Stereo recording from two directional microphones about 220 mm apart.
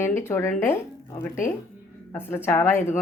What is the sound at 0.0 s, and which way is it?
A woman's voice, 10° left (ahead or behind).